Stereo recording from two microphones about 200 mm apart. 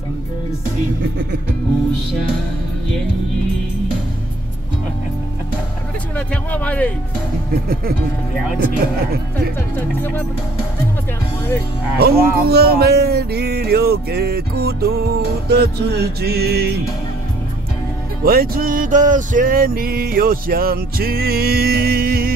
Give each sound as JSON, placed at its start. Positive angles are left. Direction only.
{"t": 6.1, "sound": "speech", "side_deg": 5}
{"t": 7.6, "sound": "music", "side_deg": -50}
{"t": 9.8, "sound": "speech", "side_deg": 10}
{"t": 12.0, "sound": "music", "side_deg": -50}
{"t": 18.2, "sound": "music", "side_deg": -50}